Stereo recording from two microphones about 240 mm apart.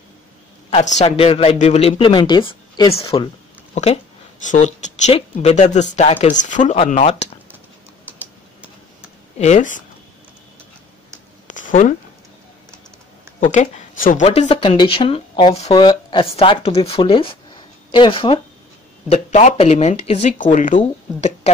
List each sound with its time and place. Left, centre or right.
0.7 s speech: left
9.4 s speech: left
11.4 s a sound: left
13.4 s speech: left